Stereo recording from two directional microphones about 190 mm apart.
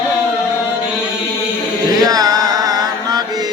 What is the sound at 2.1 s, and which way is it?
Chant, 20° right (ahead or behind).